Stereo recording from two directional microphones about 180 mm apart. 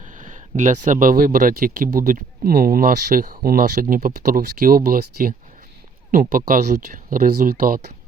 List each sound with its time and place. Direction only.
0.0 s speech: 45° right (ahead or behind)